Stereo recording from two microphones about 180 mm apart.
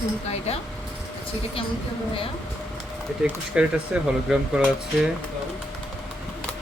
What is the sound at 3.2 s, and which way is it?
A woman's voice, 5° right (ahead or behind).